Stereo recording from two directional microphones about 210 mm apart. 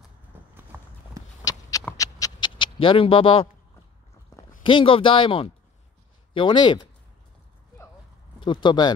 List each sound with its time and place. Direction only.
0.6 s clip-clop: 10° right (ahead or behind)
1.4 s a sound: 15° left (ahead or behind)
4.6 s speech: 25° left (ahead or behind)
8.4 s speech: 20° left (ahead or behind)